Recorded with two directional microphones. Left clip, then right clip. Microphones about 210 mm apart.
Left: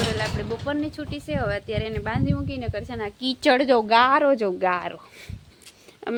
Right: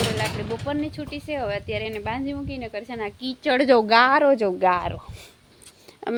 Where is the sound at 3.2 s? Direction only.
35° left (ahead or behind).